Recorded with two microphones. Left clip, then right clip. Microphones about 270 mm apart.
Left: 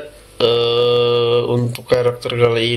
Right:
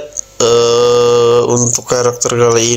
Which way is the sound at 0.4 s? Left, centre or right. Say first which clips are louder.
Right 5 dB; right.